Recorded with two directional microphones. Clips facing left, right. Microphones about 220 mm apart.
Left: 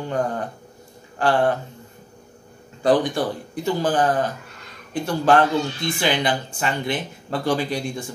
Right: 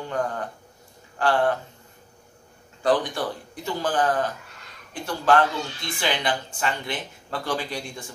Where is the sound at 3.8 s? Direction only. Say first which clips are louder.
Left 3 dB; 15° left (ahead or behind).